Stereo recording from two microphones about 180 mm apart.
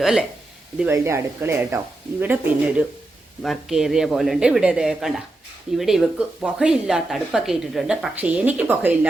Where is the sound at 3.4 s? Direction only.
Centre (ahead or behind).